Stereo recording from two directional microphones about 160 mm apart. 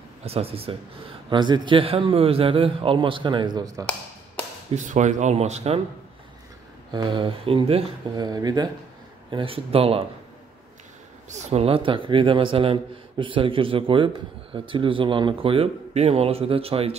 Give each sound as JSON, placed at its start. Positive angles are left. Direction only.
{"t": 0.2, "sound": "a man's voice", "side_deg": -40}
{"t": 4.7, "sound": "speech", "side_deg": -50}
{"t": 6.9, "sound": "a man's voice", "side_deg": -30}
{"t": 11.2, "sound": "a man's voice", "side_deg": -45}